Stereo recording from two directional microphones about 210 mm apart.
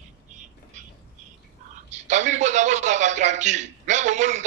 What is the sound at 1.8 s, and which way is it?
A man's voice, 35° right (ahead or behind).